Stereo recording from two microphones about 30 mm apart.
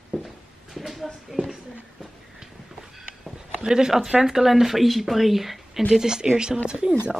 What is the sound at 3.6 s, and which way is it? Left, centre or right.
Speech, right.